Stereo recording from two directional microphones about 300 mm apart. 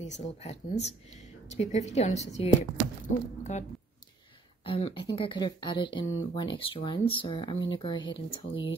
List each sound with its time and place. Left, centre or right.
0.0 s speech: left
4.6 s a woman's voice: centre